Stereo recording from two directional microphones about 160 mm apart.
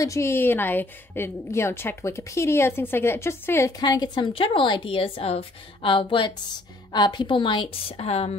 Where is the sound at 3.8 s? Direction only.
25° left (ahead or behind).